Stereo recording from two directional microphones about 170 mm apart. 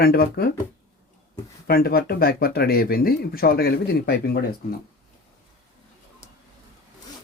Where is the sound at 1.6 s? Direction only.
60° left (ahead or behind).